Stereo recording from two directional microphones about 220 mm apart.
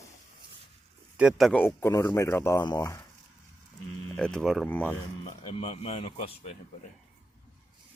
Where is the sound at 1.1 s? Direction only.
Centre (ahead or behind); by 3.0 s 15° left (ahead or behind).